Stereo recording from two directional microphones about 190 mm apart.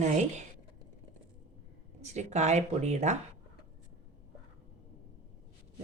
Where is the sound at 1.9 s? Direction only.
35° right (ahead or behind).